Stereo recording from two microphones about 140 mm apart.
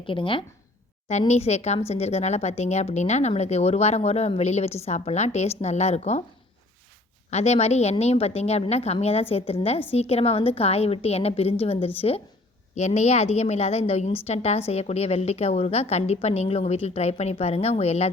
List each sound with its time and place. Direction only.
0.0 s speech: 40° left (ahead or behind)
1.3 s a woman's voice: 50° left (ahead or behind)
7.3 s a woman's voice: 50° left (ahead or behind)